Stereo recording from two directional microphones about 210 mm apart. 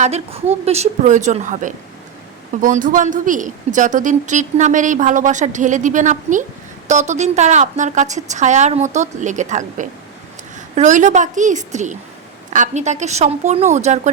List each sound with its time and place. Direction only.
0.0 s speech: 30° right (ahead or behind)